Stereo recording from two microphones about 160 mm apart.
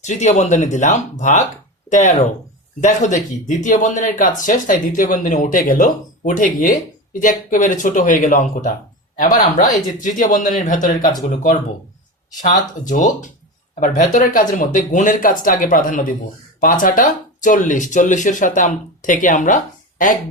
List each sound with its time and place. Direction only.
0.0 s speech: 50° left (ahead or behind)
12.4 s speech: 55° left (ahead or behind)